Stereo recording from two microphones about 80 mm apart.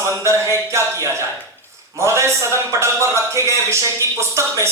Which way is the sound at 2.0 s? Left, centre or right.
Right.